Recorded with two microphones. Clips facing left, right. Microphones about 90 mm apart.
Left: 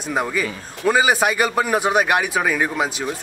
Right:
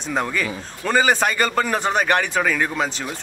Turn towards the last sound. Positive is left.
turn(degrees=10)  # may be behind; listen again after turning